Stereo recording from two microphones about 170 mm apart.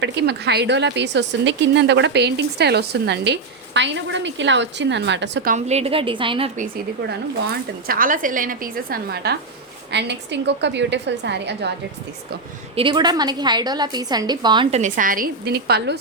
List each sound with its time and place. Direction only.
0.0 s a woman's voice: 80° right
5.5 s a woman's voice: 40° right (ahead or behind)
7.1 s a woman's voice: 70° right (ahead or behind)
9.9 s a woman's voice: 90° right
12.7 s a woman's voice: 30° right (ahead or behind)
14.7 s a woman's voice: 45° right (ahead or behind); by 16.0 s 70° right (ahead or behind)